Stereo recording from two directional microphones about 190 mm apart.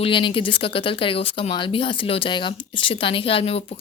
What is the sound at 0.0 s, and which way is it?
A woman's voice, 25° left (ahead or behind).